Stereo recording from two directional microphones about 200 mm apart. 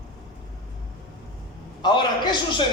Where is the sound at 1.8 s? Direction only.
20° left (ahead or behind).